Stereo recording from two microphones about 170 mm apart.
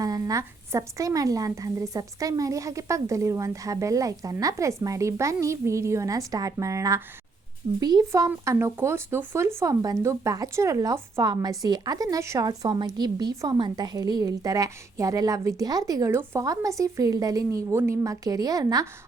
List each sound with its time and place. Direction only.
0.0 s speech: 20° right (ahead or behind)